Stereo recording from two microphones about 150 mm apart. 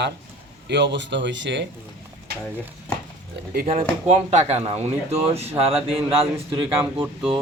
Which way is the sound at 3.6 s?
50° right (ahead or behind).